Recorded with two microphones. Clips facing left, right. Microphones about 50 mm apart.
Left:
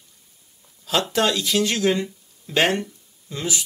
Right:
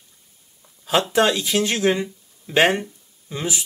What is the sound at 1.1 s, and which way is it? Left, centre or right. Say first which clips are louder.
Speech: right 1 dB; right.